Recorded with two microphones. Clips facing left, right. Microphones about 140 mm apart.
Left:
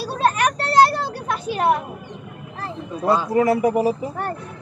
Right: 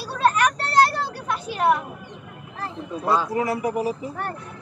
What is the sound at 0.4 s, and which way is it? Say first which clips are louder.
Children playing: left 6 dB; 15° left (ahead or behind).